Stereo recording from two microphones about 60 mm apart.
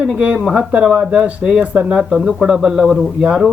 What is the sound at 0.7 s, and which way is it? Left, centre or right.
Speech, centre.